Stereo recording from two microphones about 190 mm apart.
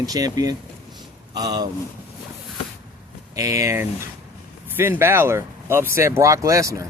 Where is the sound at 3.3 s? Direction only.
15° right (ahead or behind).